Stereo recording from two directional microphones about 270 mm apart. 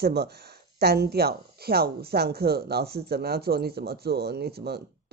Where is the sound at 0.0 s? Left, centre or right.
Right.